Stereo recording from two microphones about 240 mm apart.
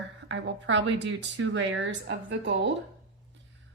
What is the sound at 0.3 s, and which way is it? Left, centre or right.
A woman's voice, right.